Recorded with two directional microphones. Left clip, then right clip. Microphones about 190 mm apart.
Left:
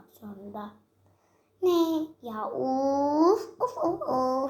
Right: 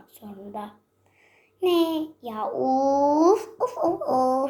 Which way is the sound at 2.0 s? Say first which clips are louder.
Right 3 dB; 5° left (ahead or behind).